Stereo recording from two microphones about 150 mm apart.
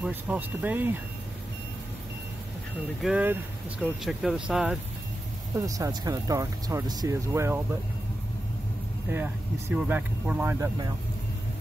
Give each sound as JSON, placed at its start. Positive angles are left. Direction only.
{"t": 0.0, "sound": "speech", "side_deg": -10}
{"t": 3.0, "sound": "speech", "side_deg": -5}
{"t": 5.7, "sound": "speech", "side_deg": -25}
{"t": 9.1, "sound": "speech", "side_deg": -15}